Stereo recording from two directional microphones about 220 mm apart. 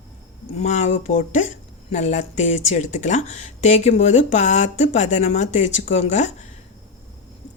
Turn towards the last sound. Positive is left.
turn(degrees=30)  # may be behind; listen again after turning